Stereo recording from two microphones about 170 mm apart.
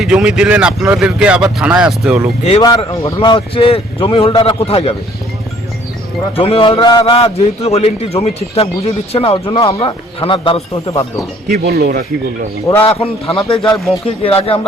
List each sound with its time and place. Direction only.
0.0 s speech: 5° right (ahead or behind)
2.4 s a man's voice: 35° left (ahead or behind)
2.6 s a man's voice: 25° left (ahead or behind)
6.3 s a man's voice: 30° left (ahead or behind)
11.4 s speech: 70° right (ahead or behind)
12.8 s a man's voice: 35° left (ahead or behind)
13.6 s speech: centre (ahead or behind)
14.2 s a man's voice: 35° left (ahead or behind)